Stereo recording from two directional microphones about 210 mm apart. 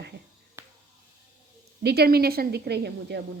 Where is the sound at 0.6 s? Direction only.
10° right (ahead or behind).